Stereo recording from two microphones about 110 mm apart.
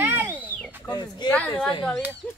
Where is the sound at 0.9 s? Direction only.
40° left (ahead or behind).